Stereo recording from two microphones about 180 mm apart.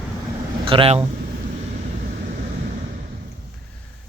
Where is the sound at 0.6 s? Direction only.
30° right (ahead or behind).